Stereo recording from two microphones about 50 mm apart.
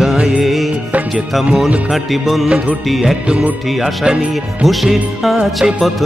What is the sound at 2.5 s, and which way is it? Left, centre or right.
Speech, right.